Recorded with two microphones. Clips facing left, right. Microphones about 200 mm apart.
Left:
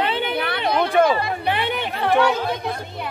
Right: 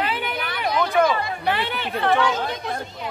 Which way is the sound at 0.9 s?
30° left (ahead or behind).